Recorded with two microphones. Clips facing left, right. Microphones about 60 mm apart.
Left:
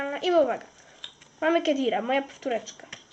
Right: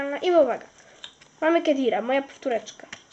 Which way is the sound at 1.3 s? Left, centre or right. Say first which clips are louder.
Right 3 dB; centre.